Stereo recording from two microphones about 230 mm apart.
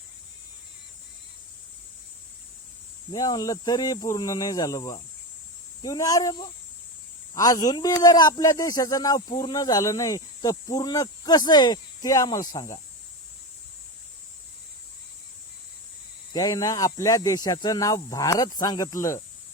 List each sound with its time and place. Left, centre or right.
3.1 s a man's voice: centre
16.3 s a man's voice: centre